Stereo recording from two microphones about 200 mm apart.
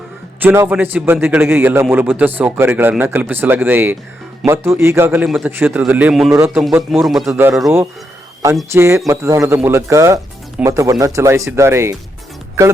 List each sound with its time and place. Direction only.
0.4 s a man's voice: 10° right (ahead or behind)
8.7 s a man's voice: 15° right (ahead or behind)